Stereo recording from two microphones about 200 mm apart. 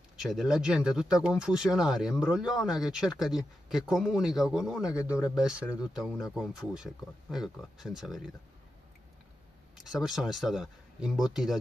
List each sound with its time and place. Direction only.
0.2 s speech: centre (ahead or behind)
4.9 s speech: 15° left (ahead or behind)
5.2 s speech: centre (ahead or behind)
9.8 s speech: centre (ahead or behind)